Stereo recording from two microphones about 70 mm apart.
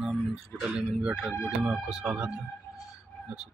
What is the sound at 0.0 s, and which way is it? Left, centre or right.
Speech, centre.